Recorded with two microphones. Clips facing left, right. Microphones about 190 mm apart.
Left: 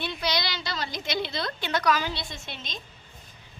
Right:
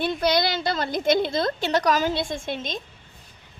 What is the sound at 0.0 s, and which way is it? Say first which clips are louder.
A woman's voice: right 8 dB; 50° right (ahead or behind).